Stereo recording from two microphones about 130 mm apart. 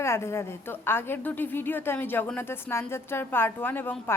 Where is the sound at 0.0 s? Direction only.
20° left (ahead or behind).